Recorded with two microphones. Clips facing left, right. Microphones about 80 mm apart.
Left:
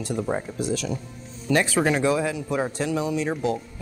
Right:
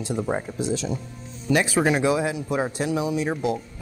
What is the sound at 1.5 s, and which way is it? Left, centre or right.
Speech, centre.